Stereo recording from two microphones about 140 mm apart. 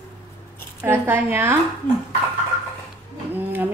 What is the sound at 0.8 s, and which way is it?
Speech, 15° right (ahead or behind).